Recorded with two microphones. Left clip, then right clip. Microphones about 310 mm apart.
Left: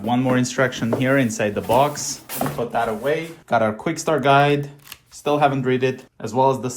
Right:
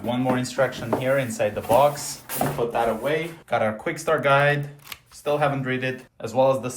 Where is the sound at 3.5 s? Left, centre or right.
Centre.